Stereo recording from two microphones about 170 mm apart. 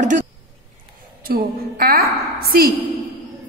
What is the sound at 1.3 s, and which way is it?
A man's voice, 60° right (ahead or behind).